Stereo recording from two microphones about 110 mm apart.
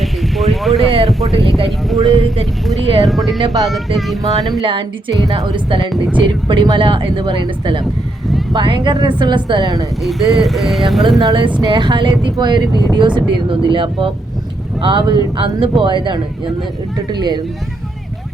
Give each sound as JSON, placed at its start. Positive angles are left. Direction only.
{"t": 0.0, "sound": "a sound", "side_deg": 0}
{"t": 2.0, "sound": "speech", "side_deg": -60}
{"t": 3.1, "sound": "speech", "side_deg": 0}
{"t": 3.3, "sound": "speech", "side_deg": -35}
{"t": 3.7, "sound": "speech", "side_deg": 0}
{"t": 4.6, "sound": "speech", "side_deg": -50}
{"t": 10.0, "sound": "speech", "side_deg": 0}
{"t": 11.2, "sound": "speech", "side_deg": -45}